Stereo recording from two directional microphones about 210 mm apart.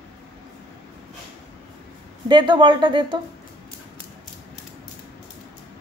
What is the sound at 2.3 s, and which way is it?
Speech, 20° right (ahead or behind).